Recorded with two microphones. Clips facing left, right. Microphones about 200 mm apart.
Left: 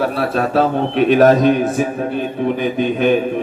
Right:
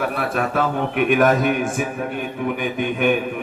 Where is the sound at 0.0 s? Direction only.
30° left (ahead or behind).